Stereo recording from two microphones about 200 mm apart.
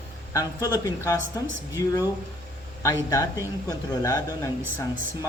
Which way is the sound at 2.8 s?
15° left (ahead or behind).